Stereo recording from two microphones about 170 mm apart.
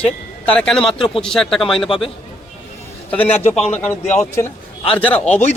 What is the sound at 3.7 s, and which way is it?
Speech, 10° left (ahead or behind).